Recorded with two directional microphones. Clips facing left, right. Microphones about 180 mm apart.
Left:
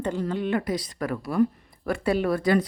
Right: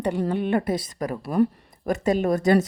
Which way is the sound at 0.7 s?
50° right (ahead or behind).